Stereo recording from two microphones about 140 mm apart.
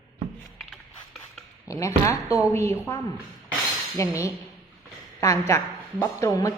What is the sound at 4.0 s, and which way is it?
A woman's voice, 20° left (ahead or behind).